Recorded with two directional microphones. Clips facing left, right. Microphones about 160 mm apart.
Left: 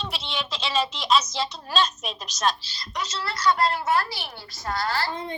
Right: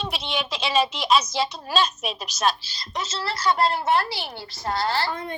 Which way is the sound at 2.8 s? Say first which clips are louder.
Right 1 dB; 25° right (ahead or behind).